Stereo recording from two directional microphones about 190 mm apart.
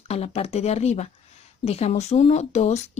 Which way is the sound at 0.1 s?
30° left (ahead or behind).